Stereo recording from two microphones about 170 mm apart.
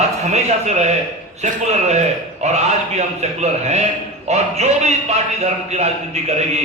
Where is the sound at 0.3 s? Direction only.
40° right (ahead or behind).